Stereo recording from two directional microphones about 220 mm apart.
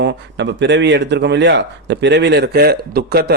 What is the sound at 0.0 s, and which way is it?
Speech, 50° right (ahead or behind).